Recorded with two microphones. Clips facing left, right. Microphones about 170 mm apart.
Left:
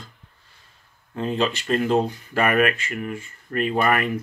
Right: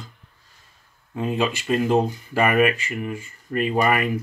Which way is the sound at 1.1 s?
10° right (ahead or behind).